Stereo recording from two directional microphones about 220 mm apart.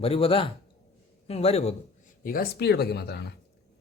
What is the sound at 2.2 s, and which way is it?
Speech, 40° left (ahead or behind).